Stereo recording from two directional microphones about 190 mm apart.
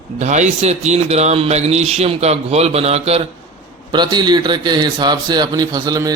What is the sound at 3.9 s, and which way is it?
A man's voice, 20° right (ahead or behind).